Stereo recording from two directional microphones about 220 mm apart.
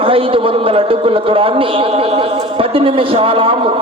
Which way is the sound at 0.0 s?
25° right (ahead or behind).